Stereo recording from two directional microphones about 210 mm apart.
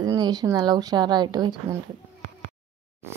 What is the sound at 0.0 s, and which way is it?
Speech, 20° right (ahead or behind).